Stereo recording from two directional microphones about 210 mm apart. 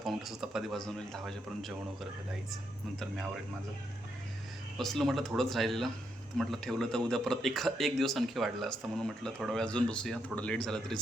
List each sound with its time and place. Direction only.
0.0 s speech: centre (ahead or behind)
4.8 s speech: centre (ahead or behind)